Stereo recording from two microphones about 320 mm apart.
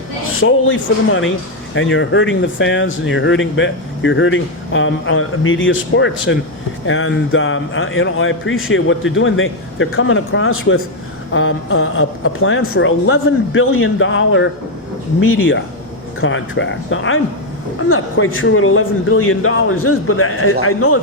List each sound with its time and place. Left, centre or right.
0.3 s speech: left